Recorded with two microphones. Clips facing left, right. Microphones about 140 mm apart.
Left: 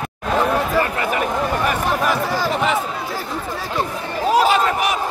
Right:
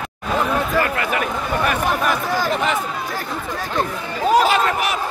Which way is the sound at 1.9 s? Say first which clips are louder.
Left 1 dB; centre (ahead or behind).